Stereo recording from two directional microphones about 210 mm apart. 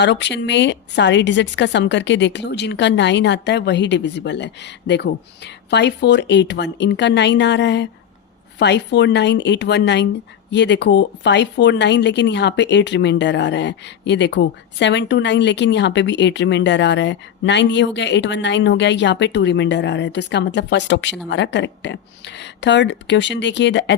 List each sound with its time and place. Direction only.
0.0 s speech: 55° left (ahead or behind)